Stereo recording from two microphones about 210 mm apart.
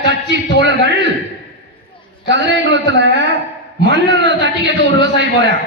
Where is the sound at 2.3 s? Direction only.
55° right (ahead or behind).